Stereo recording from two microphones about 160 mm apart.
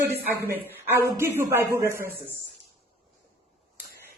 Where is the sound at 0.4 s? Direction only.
15° right (ahead or behind).